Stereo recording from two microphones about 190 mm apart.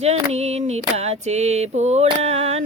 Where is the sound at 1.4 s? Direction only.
35° right (ahead or behind).